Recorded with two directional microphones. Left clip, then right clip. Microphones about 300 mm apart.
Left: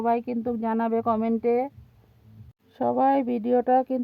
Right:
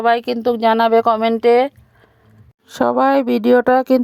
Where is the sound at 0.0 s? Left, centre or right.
Centre.